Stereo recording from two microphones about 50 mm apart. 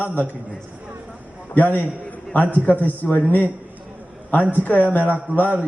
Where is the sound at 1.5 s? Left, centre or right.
Left.